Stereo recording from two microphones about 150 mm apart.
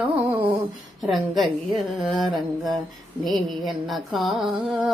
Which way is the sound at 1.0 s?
Centre (ahead or behind).